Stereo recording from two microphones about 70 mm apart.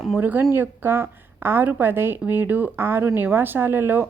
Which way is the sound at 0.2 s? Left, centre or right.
Right.